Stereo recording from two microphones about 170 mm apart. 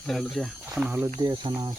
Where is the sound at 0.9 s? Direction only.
15° right (ahead or behind).